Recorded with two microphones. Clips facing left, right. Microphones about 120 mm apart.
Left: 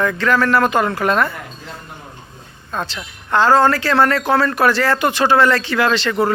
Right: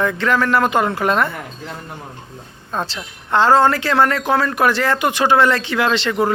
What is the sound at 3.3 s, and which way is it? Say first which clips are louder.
Speech: even; 25° right (ahead or behind).